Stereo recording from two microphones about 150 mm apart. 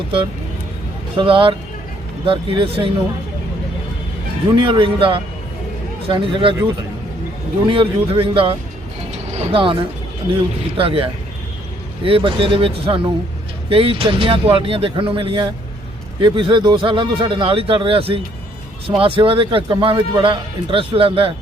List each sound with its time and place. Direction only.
1.1 s speech: 35° right (ahead or behind)
4.5 s speech: 35° right (ahead or behind)
7.7 s speech: 35° right (ahead or behind)
10.8 s speech: 40° right (ahead or behind)